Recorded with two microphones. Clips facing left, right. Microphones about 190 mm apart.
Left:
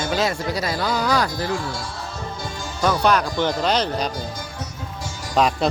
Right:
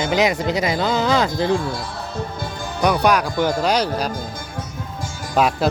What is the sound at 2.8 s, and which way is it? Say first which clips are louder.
Speech: right 2 dB; 15° right (ahead or behind).